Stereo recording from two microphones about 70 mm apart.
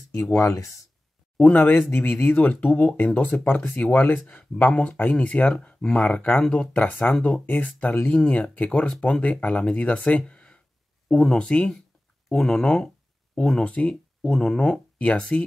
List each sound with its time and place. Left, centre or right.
0.3 s speech: left
1.4 s speech: left
4.6 s speech: centre